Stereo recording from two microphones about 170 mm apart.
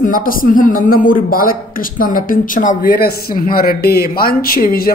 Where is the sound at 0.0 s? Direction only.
55° left (ahead or behind).